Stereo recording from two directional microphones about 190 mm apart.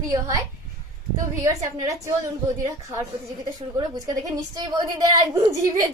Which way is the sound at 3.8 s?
20° right (ahead or behind).